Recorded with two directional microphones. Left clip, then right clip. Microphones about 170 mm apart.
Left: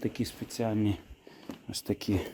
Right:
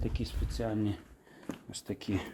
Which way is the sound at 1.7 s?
75° left (ahead or behind).